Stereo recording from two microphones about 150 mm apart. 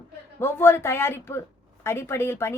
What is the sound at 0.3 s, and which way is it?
Speech, 15° left (ahead or behind).